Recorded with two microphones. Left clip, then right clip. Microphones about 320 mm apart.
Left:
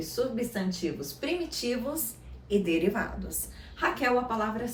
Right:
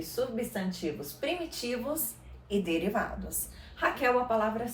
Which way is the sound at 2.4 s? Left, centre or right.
Centre.